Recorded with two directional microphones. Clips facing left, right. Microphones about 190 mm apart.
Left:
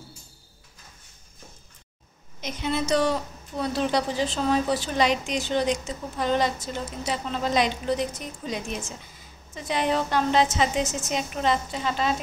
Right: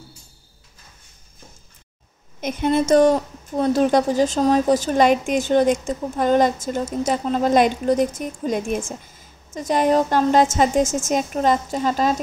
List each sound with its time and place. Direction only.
2.4 s a woman's voice: 50° right (ahead or behind)